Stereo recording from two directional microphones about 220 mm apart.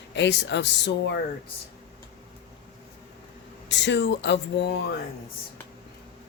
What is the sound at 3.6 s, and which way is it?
A man's voice, 55° left (ahead or behind).